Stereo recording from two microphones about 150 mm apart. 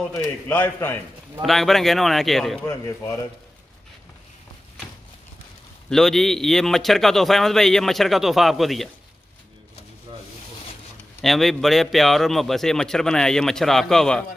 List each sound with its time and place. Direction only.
0.1 s a man's voice: 15° left (ahead or behind)
1.4 s a man's voice: centre (ahead or behind)
2.6 s a man's voice: 15° left (ahead or behind)
5.9 s a man's voice: centre (ahead or behind)
10.1 s rub: 35° right (ahead or behind)
11.1 s a man's voice: centre (ahead or behind)